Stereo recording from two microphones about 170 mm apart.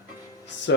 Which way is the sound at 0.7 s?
90° left.